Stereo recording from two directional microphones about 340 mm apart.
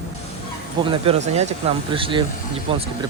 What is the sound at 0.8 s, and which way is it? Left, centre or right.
Speech, centre.